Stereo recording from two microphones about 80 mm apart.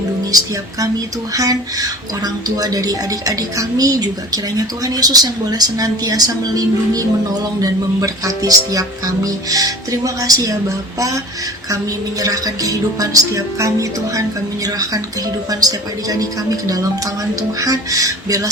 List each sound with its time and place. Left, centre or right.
0.3 s speech: right
12.2 s speech: right
15.4 s speech: right